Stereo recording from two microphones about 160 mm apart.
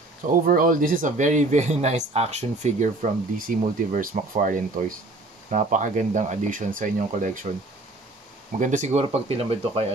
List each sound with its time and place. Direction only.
0.3 s speech: 60° right (ahead or behind)
8.5 s speech: 50° right (ahead or behind)